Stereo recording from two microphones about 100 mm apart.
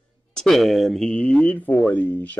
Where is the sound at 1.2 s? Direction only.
15° left (ahead or behind).